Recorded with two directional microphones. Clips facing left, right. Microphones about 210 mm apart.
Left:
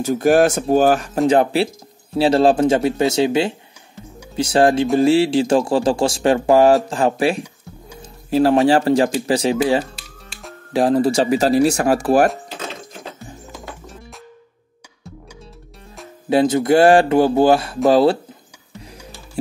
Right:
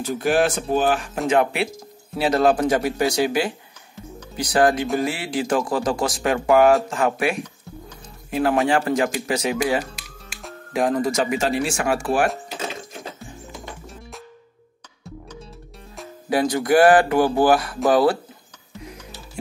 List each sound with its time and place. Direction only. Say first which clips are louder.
0.0 s speech: left 6 dB; 45° left (ahead or behind)
16.3 s speech: left 5 dB; 25° left (ahead or behind)